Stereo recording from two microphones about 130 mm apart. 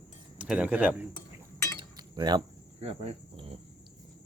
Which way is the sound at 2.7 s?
55° right (ahead or behind).